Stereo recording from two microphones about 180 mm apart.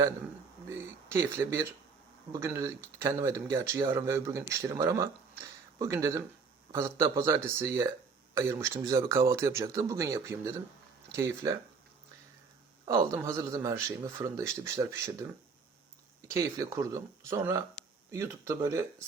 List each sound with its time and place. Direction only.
0.7 s speech: 15° right (ahead or behind)
12.8 s speech: 20° right (ahead or behind)